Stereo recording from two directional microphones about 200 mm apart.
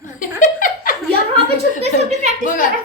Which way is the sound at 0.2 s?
40° left (ahead or behind).